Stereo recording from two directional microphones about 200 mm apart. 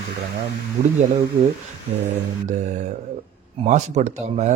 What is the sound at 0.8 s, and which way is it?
Speech, 30° right (ahead or behind).